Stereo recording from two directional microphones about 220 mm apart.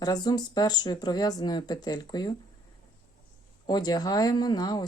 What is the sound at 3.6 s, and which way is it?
Speech, 20° left (ahead or behind).